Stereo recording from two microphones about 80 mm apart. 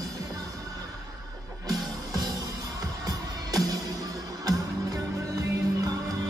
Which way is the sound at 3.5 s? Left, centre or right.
Right.